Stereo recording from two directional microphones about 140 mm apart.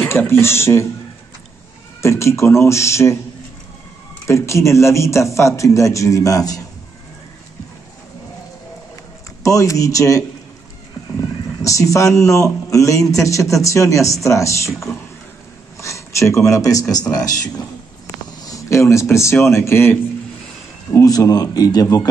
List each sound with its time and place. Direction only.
0.0 s speech: 15° left (ahead or behind)
2.0 s a man's voice: 20° left (ahead or behind)
4.3 s a man's voice: 20° left (ahead or behind)
9.4 s a man's voice: 25° left (ahead or behind)
11.6 s a man's voice: 25° left (ahead or behind)
15.8 s a man's voice: 20° left (ahead or behind)